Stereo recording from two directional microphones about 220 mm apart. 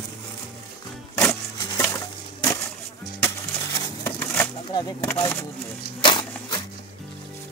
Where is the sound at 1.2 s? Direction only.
15° left (ahead or behind).